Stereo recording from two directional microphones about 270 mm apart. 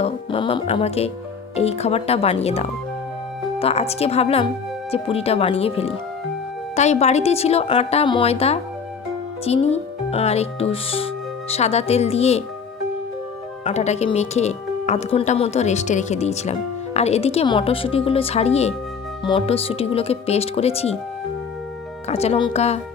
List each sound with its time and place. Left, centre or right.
0.0 s speech: centre
13.7 s speech: left
22.0 s speech: left